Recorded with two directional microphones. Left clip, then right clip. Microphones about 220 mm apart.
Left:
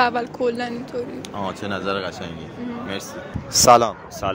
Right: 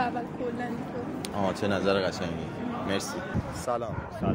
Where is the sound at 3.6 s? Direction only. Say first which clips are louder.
Left 19 dB; 55° left (ahead or behind).